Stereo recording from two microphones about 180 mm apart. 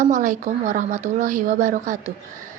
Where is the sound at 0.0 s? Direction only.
45° right (ahead or behind).